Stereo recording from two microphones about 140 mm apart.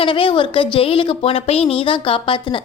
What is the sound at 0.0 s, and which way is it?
Speech, 35° left (ahead or behind).